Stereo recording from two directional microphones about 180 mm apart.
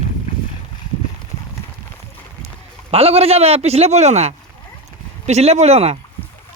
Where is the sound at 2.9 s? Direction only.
35° right (ahead or behind).